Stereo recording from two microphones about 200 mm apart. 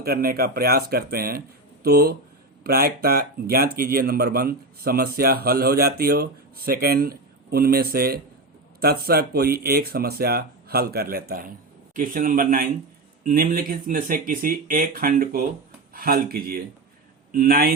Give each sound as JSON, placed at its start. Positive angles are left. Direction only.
{"t": 0.0, "sound": "speech", "side_deg": -50}